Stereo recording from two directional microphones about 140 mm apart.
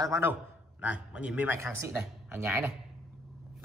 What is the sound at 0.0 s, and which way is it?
A man's voice, 20° right (ahead or behind).